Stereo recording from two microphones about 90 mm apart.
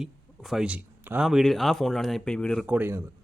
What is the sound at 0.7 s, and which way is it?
Speech, 20° right (ahead or behind).